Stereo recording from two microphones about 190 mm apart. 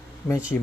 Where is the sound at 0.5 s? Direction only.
5° left (ahead or behind).